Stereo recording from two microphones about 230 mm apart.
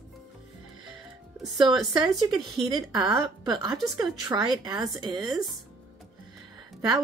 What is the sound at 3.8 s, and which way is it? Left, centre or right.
Speech, centre.